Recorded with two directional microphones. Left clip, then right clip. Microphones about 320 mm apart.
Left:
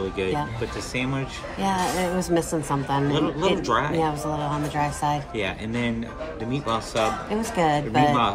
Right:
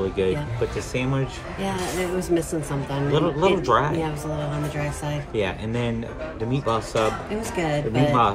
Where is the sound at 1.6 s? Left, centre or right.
Centre.